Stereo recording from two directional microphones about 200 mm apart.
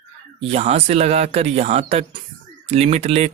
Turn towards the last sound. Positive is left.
turn(degrees=-30)  # may be behind; listen again after turning